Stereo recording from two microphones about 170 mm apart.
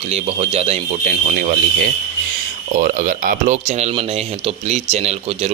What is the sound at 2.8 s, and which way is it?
Speech, 55° right (ahead or behind).